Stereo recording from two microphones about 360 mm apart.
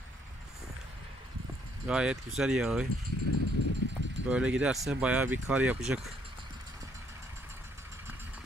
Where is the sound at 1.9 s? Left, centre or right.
Centre.